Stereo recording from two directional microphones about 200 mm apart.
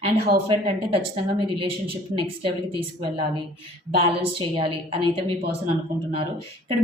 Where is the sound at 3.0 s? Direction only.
25° right (ahead or behind).